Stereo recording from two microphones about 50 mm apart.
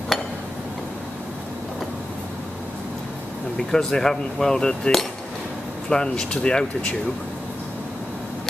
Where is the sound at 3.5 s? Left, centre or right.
Centre.